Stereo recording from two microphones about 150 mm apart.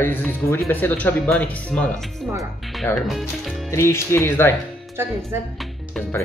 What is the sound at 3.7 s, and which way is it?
Speech, 20° left (ahead or behind).